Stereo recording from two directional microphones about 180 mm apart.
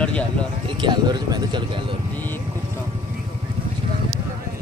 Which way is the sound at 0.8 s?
25° right (ahead or behind).